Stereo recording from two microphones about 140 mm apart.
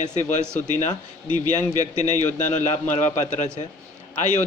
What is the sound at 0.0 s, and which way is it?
A man's voice, 60° left (ahead or behind).